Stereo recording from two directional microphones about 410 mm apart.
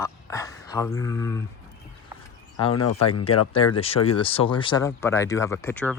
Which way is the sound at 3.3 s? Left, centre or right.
Centre.